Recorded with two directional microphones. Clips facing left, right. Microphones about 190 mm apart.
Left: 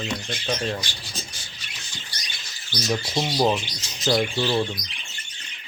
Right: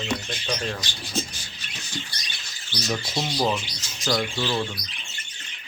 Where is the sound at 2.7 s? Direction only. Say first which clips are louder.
Left 3 dB; 15° left (ahead or behind).